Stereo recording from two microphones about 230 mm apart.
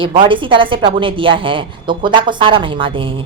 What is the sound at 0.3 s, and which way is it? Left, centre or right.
A woman's voice, right.